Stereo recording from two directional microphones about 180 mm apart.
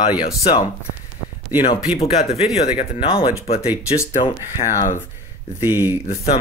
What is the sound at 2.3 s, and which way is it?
Speech, 35° left (ahead or behind).